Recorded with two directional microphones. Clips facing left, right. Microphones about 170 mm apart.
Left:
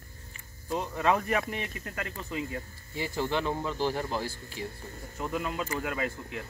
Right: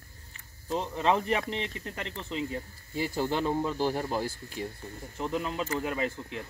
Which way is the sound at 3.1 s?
40° right (ahead or behind).